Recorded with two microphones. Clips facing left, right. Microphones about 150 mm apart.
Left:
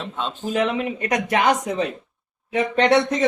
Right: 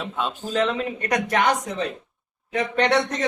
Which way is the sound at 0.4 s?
10° left (ahead or behind).